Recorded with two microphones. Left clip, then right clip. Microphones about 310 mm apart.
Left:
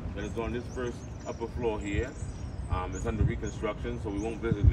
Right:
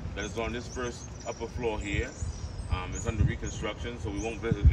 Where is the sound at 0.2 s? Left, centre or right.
Centre.